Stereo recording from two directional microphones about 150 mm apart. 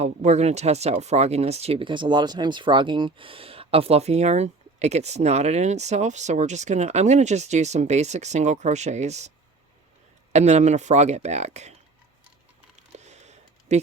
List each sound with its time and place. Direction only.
0.0 s speech: 50° right (ahead or behind)
10.3 s speech: 50° right (ahead or behind)
12.9 s a sound: 50° right (ahead or behind)